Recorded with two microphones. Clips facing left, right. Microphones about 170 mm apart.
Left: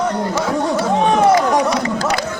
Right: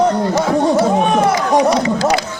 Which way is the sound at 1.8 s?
45° left (ahead or behind).